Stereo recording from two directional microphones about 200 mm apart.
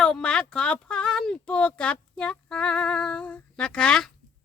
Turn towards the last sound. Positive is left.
turn(degrees=5)  # may be behind; listen again after turning